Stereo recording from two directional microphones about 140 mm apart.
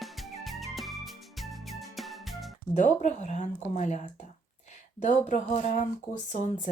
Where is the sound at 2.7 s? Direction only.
55° left (ahead or behind).